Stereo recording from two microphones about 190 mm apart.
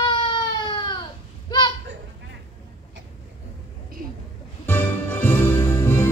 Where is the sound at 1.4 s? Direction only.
25° left (ahead or behind).